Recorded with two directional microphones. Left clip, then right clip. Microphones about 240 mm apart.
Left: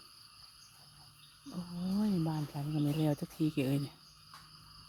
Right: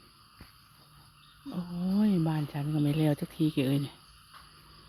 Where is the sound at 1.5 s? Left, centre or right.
Centre.